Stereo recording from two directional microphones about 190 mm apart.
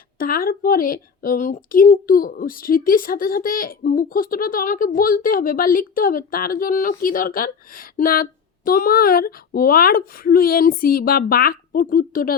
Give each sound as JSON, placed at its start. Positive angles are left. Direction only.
{"t": 0.2, "sound": "a woman's voice", "side_deg": 50}